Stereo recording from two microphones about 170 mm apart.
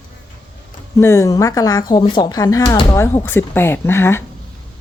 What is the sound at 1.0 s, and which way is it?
Speech, 15° left (ahead or behind).